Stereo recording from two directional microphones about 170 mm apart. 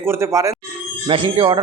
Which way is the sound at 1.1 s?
30° right (ahead or behind).